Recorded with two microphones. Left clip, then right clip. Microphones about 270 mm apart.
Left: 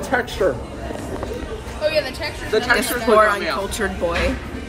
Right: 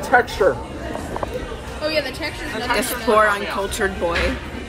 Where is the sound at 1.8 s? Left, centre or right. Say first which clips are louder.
Left 2 dB; left.